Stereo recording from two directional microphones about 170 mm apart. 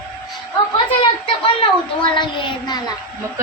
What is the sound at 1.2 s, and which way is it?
Speech, 30° left (ahead or behind).